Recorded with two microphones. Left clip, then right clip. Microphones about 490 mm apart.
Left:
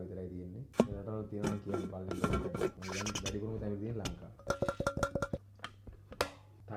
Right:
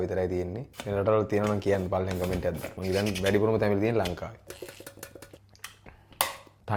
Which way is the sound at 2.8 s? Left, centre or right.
Right.